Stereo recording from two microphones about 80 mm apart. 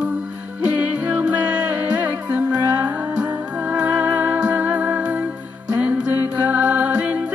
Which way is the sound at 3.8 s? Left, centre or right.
Right.